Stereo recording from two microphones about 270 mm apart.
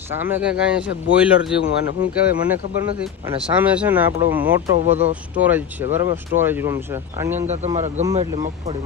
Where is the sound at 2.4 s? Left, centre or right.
Centre.